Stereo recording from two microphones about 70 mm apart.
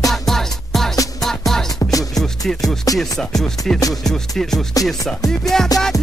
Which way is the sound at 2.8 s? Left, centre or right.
Left.